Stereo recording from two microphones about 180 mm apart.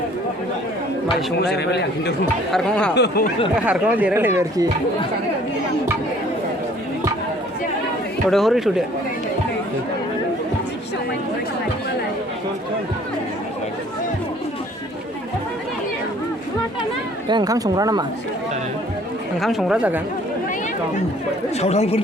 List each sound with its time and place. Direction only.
1.5 s a man's voice: 70° left (ahead or behind)
2.5 s speech: 5° left (ahead or behind)
2.9 s a man's voice: 70° left (ahead or behind)
3.6 s speech: 10° right (ahead or behind)
8.3 s speech: centre (ahead or behind)
17.2 s speech: 25° right (ahead or behind)
19.4 s speech: centre (ahead or behind)
21.6 s speech: 35° left (ahead or behind)